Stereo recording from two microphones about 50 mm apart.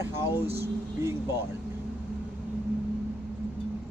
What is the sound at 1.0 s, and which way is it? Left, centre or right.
Speech, right.